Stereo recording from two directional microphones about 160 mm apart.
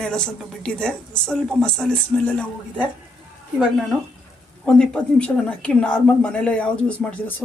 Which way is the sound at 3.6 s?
Centre (ahead or behind).